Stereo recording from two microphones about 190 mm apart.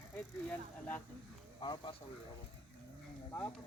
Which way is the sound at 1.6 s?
25° left (ahead or behind).